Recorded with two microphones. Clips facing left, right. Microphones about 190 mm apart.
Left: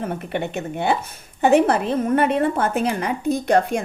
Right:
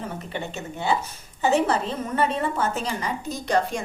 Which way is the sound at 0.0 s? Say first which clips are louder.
Left 6 dB; 60° left (ahead or behind).